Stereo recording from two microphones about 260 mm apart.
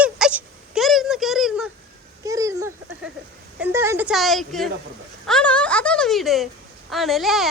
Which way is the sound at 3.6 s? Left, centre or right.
Centre.